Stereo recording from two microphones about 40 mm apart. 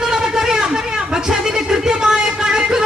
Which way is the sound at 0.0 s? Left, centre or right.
Centre.